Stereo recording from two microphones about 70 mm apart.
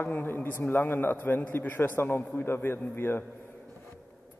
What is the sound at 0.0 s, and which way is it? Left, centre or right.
A man's voice, left.